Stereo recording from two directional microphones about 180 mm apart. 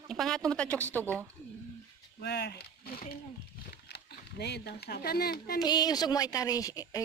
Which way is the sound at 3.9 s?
65° left (ahead or behind).